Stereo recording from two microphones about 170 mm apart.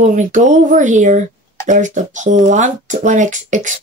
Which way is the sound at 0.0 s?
45° right (ahead or behind).